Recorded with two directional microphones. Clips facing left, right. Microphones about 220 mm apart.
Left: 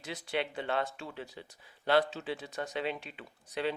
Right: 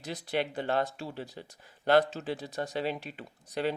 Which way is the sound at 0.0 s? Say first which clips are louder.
Right 3 dB; 40° right (ahead or behind).